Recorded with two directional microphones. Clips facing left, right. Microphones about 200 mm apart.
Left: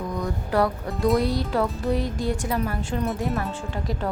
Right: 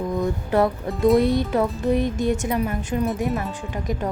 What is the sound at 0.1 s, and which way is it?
Music, 25° right (ahead or behind).